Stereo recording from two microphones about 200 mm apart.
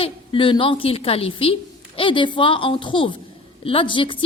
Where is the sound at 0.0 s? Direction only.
25° left (ahead or behind).